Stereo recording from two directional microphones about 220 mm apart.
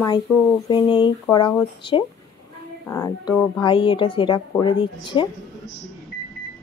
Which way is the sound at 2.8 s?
15° left (ahead or behind).